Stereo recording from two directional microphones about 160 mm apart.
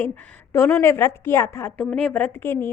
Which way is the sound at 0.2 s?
15° left (ahead or behind).